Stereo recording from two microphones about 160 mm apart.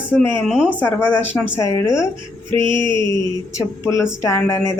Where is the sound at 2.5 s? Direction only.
30° right (ahead or behind).